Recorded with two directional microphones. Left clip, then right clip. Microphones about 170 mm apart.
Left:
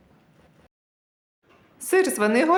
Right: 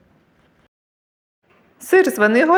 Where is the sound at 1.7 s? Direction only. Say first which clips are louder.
Right 7 dB; 20° right (ahead or behind).